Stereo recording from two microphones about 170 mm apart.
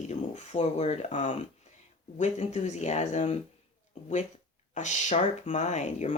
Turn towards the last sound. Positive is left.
turn(degrees=45)  # may be behind; listen again after turning